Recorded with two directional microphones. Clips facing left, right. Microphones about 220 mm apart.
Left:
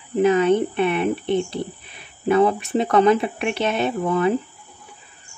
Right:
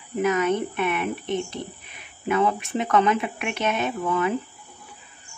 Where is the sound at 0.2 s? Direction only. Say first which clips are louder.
Left 6 dB; 30° left (ahead or behind).